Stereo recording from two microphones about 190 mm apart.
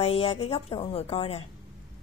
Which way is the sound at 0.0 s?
35° left (ahead or behind).